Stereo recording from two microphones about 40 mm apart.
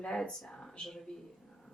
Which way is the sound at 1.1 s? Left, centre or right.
Centre.